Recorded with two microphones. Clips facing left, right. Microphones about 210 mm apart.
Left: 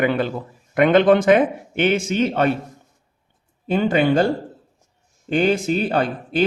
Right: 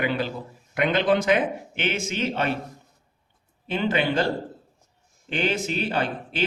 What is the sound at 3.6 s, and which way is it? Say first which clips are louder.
A man's voice: left 6 dB; 45° left (ahead or behind).